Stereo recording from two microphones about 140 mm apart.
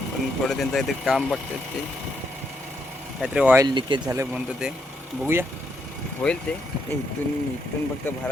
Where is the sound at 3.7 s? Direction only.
35° right (ahead or behind).